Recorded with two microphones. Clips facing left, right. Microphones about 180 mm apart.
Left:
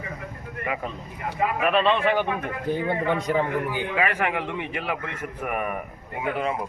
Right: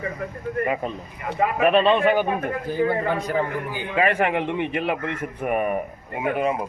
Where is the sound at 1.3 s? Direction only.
25° right (ahead or behind).